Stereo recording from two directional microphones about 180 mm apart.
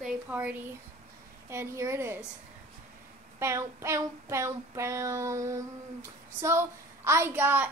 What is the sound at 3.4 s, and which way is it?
Speech, 15° right (ahead or behind).